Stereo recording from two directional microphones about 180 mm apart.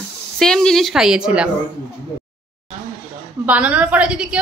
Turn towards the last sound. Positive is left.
turn(degrees=-5)  # may be behind; listen again after turning